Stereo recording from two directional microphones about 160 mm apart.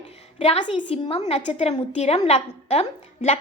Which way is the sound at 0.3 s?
40° left (ahead or behind).